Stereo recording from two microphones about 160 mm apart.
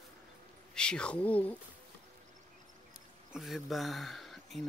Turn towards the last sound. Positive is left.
turn(degrees=0)  # may be behind; listen again after turning